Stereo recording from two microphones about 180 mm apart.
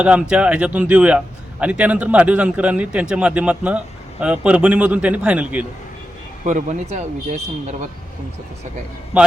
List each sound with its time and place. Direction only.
0.0 s a man's voice: 5° right (ahead or behind)
6.4 s speech: 45° right (ahead or behind)
9.1 s a man's voice: 5° right (ahead or behind)